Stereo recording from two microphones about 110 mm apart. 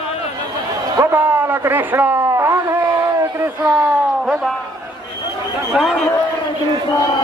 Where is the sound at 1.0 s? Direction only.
20° right (ahead or behind).